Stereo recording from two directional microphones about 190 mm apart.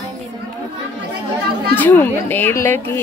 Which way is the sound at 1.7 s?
10° left (ahead or behind).